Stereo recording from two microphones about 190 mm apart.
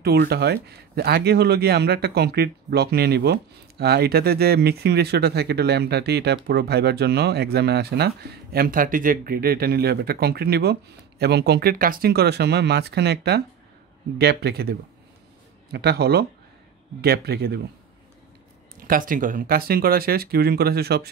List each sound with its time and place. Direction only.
0.0 s speech: 55° right (ahead or behind)
18.9 s speech: 45° right (ahead or behind)